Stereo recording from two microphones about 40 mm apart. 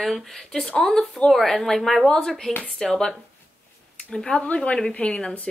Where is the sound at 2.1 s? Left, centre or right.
Centre.